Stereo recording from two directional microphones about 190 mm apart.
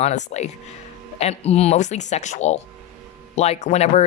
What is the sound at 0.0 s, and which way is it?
Speech, 40° left (ahead or behind).